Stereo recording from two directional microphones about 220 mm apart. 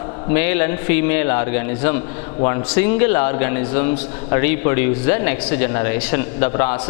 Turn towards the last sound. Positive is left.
turn(degrees=20)  # may be behind; listen again after turning